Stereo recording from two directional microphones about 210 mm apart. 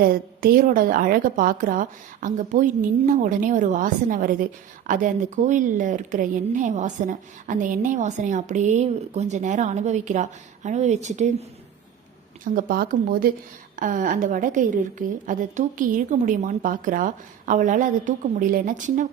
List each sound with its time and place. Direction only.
0.0 s a woman's voice: 45° right (ahead or behind)
12.5 s a woman's voice: 40° right (ahead or behind)